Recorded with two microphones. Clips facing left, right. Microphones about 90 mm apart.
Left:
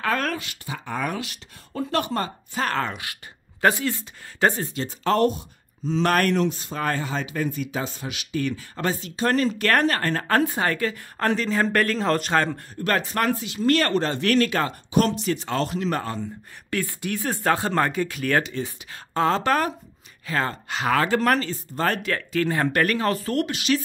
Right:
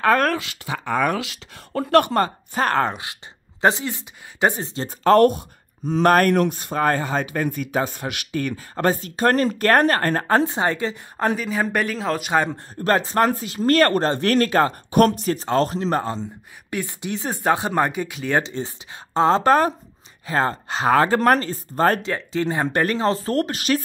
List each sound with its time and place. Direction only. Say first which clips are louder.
0.0 s speech: right 7 dB; 45° right (ahead or behind)
0.3 s speech: right 5 dB; 85° right; by 2.9 s 45° right (ahead or behind)
2.9 s speech: right 3 dB; 25° right (ahead or behind)
4.8 s speech: right 7 dB; 50° right (ahead or behind)
10.2 s speech: even; 25° right (ahead or behind)
12.8 s speech: right 4 dB; 30° right (ahead or behind)
22.0 s speech: right 1 dB; 20° right (ahead or behind); by 23.8 s 45° right (ahead or behind)